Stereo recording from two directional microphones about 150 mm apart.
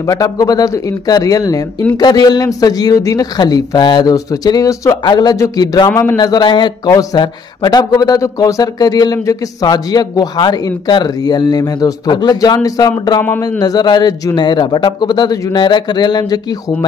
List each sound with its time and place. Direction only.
0.0 s a man's voice: 25° left (ahead or behind)